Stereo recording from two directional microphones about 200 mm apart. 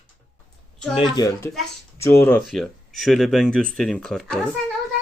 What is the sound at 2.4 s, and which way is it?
Speech, centre (ahead or behind).